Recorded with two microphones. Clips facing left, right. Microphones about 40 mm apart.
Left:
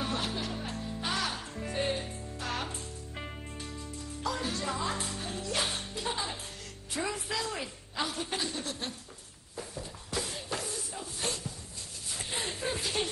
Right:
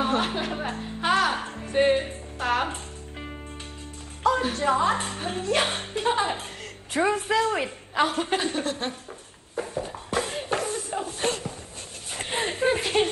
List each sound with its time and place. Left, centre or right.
0.0 s music: right
4.2 s a woman's voice: right
9.6 s a sound: right